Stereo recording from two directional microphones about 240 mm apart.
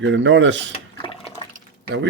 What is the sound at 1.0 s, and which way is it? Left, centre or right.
Water, left.